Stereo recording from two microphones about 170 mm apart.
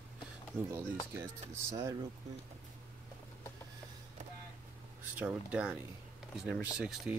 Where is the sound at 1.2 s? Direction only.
15° right (ahead or behind).